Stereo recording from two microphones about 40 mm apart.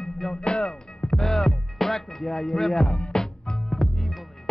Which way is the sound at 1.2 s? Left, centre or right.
Centre.